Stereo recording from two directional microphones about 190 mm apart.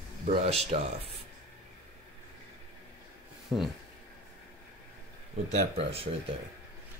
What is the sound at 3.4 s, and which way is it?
Speech, centre (ahead or behind).